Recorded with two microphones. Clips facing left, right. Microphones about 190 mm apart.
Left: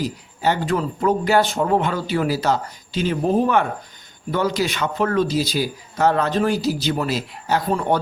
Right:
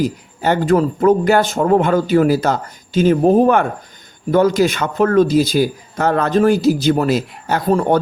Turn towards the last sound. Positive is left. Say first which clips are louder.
# right 5 dB
turn(degrees=-45)  # may be behind; listen again after turning